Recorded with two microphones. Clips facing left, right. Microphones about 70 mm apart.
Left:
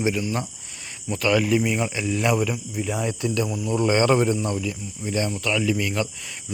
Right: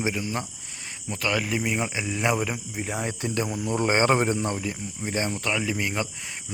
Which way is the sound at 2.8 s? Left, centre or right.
Right.